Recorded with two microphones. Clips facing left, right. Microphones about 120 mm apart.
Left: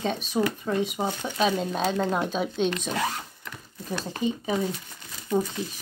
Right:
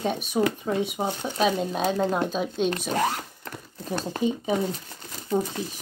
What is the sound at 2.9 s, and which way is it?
Zipper, 45° right (ahead or behind).